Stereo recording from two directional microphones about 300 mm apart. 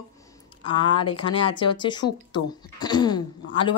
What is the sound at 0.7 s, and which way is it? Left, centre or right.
Speech, centre.